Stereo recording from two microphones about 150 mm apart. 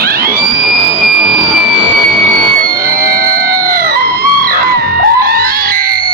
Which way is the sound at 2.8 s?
70° right (ahead or behind).